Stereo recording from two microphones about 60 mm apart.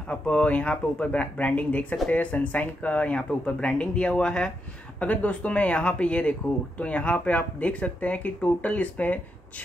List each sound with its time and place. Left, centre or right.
0.1 s speech: centre
5.0 s speech: left